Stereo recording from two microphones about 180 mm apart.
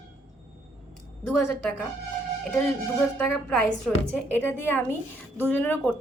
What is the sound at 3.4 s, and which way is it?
A woman's voice, 5° left (ahead or behind).